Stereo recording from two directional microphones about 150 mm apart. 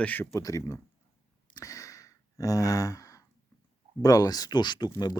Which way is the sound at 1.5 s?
20° left (ahead or behind).